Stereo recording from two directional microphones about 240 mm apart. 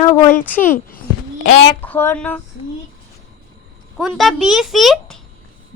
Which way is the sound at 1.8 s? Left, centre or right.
Centre.